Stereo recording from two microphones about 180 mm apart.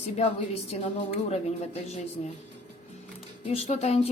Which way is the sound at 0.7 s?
40° left (ahead or behind).